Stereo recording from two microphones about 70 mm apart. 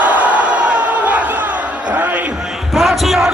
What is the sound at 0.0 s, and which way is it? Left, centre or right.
Crowd, right.